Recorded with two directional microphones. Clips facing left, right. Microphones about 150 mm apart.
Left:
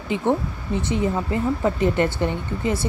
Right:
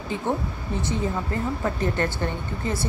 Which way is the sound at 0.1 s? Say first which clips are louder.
Left 5 dB; 15° left (ahead or behind).